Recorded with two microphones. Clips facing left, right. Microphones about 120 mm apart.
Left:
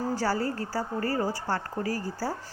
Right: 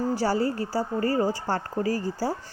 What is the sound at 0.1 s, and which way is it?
Speech, 15° right (ahead or behind).